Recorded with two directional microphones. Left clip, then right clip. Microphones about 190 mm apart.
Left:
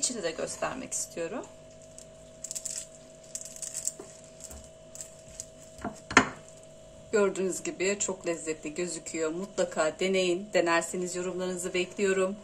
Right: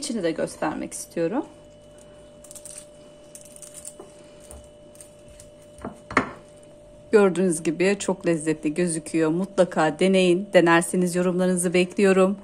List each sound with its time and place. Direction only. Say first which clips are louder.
0.0 s speech: right 6 dB; 45° right (ahead or behind)
7.1 s speech: right 8 dB; 45° right (ahead or behind)